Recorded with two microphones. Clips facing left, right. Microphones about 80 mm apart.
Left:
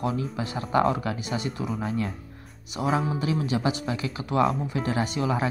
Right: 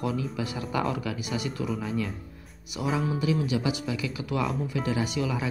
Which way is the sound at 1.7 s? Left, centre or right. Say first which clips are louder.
Left 1 dB; left.